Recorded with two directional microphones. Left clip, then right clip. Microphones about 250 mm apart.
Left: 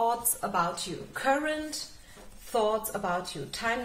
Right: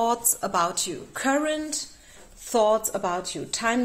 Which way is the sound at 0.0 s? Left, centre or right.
Right.